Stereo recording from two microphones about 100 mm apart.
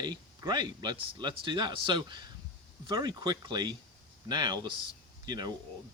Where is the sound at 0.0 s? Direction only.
45° right (ahead or behind).